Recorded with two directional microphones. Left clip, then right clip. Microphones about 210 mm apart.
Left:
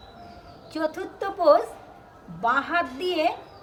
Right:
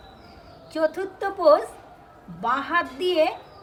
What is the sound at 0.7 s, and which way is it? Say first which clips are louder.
A man's voice: right 4 dB; centre (ahead or behind).